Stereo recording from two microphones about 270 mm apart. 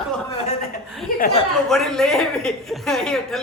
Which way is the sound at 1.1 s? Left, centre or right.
Left.